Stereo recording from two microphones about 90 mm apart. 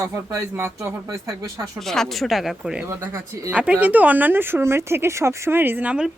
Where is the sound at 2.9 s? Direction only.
30° right (ahead or behind).